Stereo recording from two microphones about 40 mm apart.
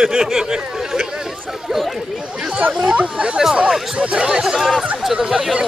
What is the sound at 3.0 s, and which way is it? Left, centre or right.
Speech, right.